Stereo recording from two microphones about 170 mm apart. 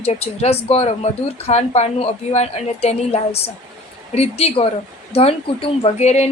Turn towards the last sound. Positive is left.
turn(degrees=40)  # may be behind; listen again after turning